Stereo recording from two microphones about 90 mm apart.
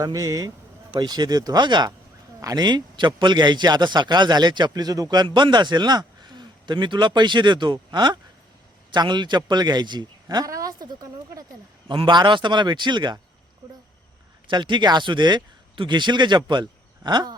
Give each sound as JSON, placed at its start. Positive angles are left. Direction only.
{"t": 0.0, "sound": "speech", "side_deg": -40}
{"t": 2.4, "sound": "a man's voice", "side_deg": -40}
{"t": 2.6, "sound": "a man's voice", "side_deg": -55}
{"t": 11.9, "sound": "a man's voice", "side_deg": -60}
{"t": 14.5, "sound": "a man's voice", "side_deg": -60}